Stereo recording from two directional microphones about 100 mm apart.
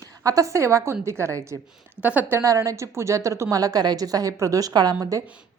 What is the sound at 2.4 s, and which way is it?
A woman's voice, 30° right (ahead or behind).